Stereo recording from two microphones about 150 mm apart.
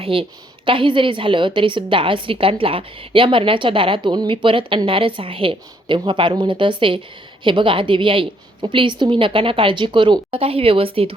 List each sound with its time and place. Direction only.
0.0 s a woman's voice: 35° right (ahead or behind)